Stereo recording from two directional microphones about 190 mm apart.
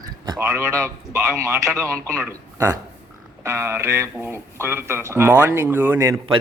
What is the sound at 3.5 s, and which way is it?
Speech, 15° right (ahead or behind).